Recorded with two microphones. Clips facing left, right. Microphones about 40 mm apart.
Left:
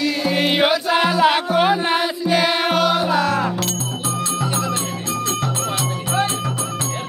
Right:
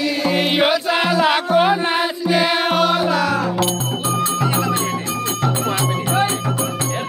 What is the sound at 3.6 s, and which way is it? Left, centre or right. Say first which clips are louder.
Music: right 4 dB; centre.